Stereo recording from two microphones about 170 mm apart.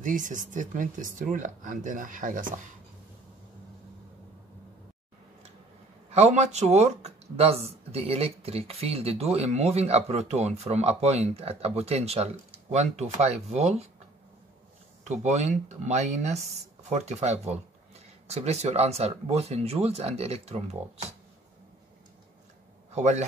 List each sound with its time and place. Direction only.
0.0 s speech: 50° right (ahead or behind)
6.0 s speech: 40° right (ahead or behind)
15.0 s speech: 45° right (ahead or behind)
22.9 s speech: 45° right (ahead or behind)